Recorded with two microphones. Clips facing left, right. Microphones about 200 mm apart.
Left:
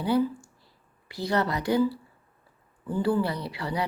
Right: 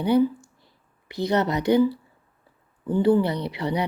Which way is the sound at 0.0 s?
20° right (ahead or behind).